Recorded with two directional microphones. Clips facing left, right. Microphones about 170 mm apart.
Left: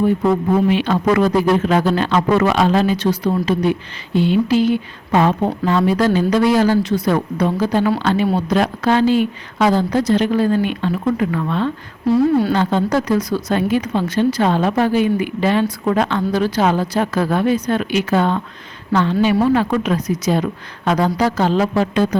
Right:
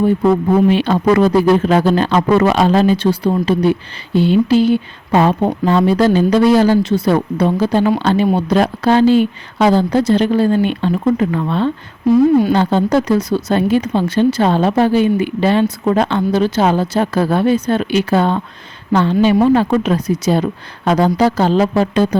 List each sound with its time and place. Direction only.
0.7 s a man's voice: 35° right (ahead or behind)
12.0 s a woman's voice: 15° right (ahead or behind)
12.5 s a man's voice: 30° right (ahead or behind)